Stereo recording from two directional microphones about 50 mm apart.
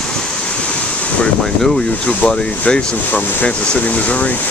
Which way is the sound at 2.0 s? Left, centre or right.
Centre.